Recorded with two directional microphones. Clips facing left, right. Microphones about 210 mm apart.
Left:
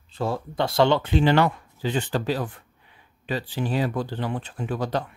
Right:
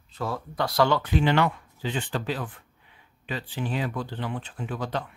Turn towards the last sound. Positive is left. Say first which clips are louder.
# left 4 dB
turn(degrees=40)  # may be behind; listen again after turning